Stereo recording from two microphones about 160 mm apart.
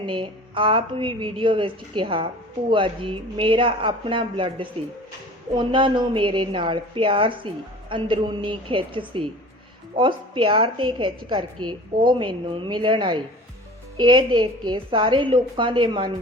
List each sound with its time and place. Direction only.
0.0 s a woman's voice: 30° right (ahead or behind)